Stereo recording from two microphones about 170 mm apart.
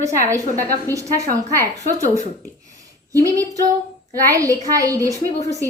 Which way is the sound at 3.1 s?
20° right (ahead or behind).